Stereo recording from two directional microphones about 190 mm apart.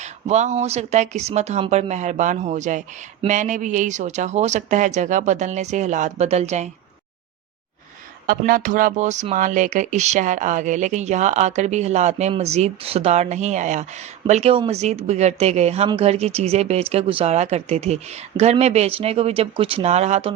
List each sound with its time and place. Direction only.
0.0 s speech: 35° right (ahead or behind)
8.3 s speech: 45° right (ahead or behind)